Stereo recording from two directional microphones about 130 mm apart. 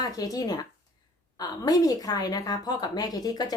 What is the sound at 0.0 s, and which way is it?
A woman's voice, 30° left (ahead or behind).